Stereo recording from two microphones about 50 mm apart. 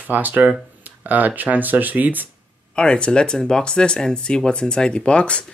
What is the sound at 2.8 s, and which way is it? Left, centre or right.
Speech, centre.